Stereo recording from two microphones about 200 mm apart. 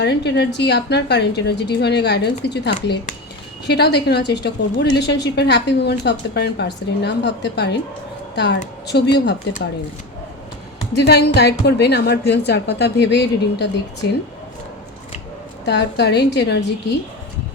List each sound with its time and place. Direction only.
0.0 s a woman's voice: 60° left (ahead or behind)
8.9 s a woman's voice: 60° left (ahead or behind)
10.9 s a woman's voice: 55° left (ahead or behind)
15.6 s a woman's voice: 60° left (ahead or behind)